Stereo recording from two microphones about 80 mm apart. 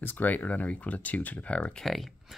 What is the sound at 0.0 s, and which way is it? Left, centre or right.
Speech, left.